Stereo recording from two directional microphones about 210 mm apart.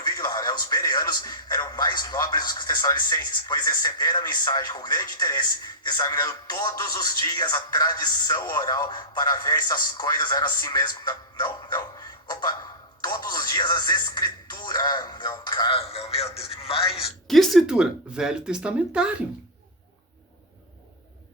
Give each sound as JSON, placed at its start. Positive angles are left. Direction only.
{"t": 0.0, "sound": "a man's voice", "side_deg": 20}
{"t": 13.0, "sound": "music", "side_deg": 20}
{"t": 17.2, "sound": "speech", "side_deg": 0}